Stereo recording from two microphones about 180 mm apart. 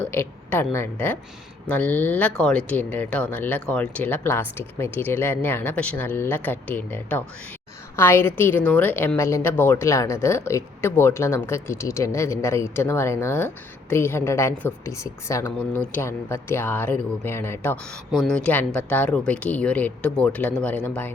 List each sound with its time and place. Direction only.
0.0 s speech: 10° left (ahead or behind)